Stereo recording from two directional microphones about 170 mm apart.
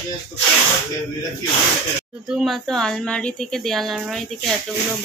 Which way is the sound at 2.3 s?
Centre (ahead or behind).